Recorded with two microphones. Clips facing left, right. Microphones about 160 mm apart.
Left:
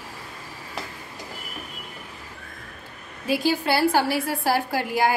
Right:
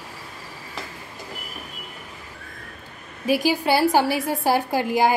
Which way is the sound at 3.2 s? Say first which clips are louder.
Right 2 dB; 15° right (ahead or behind).